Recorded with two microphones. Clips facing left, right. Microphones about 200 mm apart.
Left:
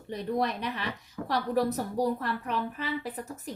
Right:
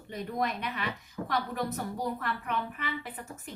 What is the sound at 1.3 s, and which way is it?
Speech, 35° left (ahead or behind).